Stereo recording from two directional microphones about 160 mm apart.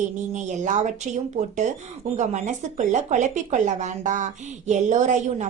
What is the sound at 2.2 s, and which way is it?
Speech, 50° right (ahead or behind).